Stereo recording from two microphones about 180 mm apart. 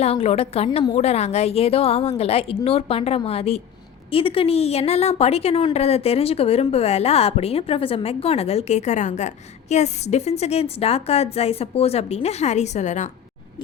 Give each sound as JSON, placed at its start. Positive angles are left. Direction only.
{"t": 0.0, "sound": "a woman's voice", "side_deg": 35}